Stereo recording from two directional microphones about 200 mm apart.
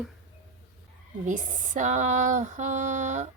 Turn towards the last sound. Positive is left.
turn(degrees=-35)  # may be behind; listen again after turning